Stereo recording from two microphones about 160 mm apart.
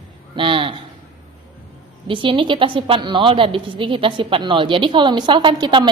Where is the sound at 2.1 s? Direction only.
30° right (ahead or behind).